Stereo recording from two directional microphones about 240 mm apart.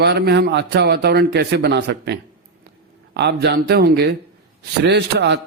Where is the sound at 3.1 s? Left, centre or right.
Right.